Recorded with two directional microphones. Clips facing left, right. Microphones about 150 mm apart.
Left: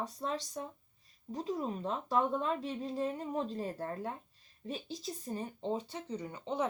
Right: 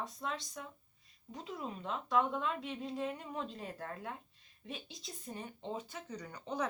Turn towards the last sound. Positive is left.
turn(degrees=25)  # may be behind; listen again after turning